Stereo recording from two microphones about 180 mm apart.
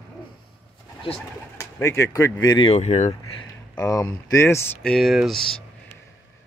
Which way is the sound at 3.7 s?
20° left (ahead or behind).